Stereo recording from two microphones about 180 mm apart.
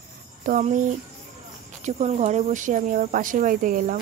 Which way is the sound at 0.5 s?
45° right (ahead or behind).